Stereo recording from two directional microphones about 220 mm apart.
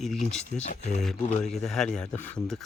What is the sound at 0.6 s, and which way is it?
Speech, 30° left (ahead or behind).